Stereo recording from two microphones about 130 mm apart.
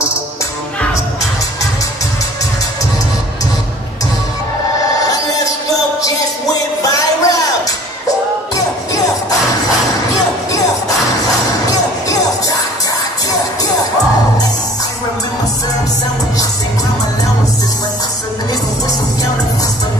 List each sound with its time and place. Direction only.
5.0 s music: 25° left (ahead or behind)
9.7 s music: 25° left (ahead or behind)